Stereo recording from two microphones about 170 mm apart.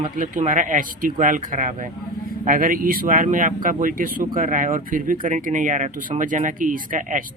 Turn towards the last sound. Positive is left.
turn(degrees=-50)  # may be behind; listen again after turning